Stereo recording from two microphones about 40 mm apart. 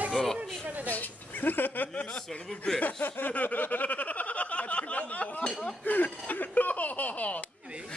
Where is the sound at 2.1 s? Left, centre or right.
Centre.